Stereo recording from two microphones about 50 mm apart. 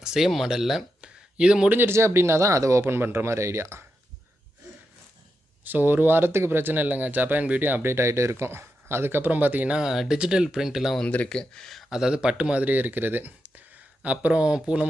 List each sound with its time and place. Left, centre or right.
0.0 s speech: centre
1.0 s a sound: centre
1.9 s speech: right
5.6 s speech: right
7.9 s speech: right
9.7 s speech: centre
11.0 s speech: left
11.3 s speech: centre
11.9 s speech: centre